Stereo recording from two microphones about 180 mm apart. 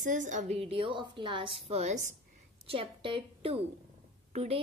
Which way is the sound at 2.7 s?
30° right (ahead or behind).